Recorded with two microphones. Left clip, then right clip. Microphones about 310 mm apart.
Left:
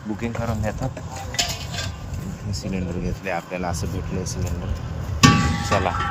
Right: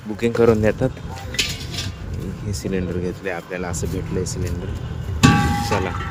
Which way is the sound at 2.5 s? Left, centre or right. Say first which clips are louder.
Right 5 dB; centre.